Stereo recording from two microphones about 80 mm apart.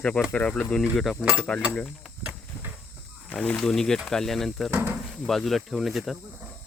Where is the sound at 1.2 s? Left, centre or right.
Centre.